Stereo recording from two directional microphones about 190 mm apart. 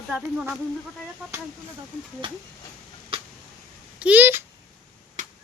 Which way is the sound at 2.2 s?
25° right (ahead or behind).